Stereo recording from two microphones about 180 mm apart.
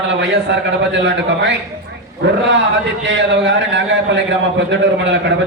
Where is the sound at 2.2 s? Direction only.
70° right (ahead or behind).